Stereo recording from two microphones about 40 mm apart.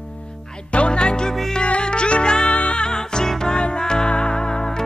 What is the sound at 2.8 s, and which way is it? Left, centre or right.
Music, centre.